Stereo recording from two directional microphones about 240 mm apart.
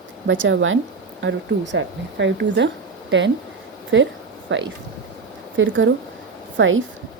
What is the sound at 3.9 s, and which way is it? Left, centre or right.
Speech, right.